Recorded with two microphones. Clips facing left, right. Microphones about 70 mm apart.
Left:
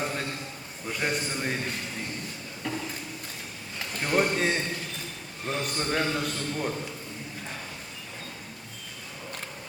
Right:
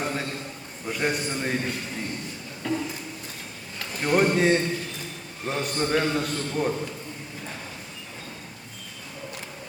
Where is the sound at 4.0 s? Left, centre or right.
Centre.